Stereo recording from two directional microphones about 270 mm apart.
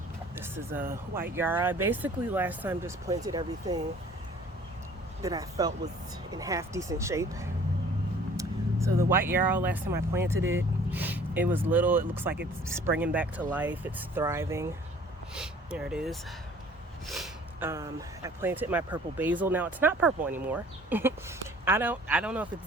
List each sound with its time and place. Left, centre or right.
0.3 s a sound: centre
1.4 s speech: centre
5.2 s speech: centre